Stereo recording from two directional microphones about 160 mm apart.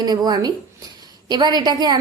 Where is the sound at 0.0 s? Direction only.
25° right (ahead or behind).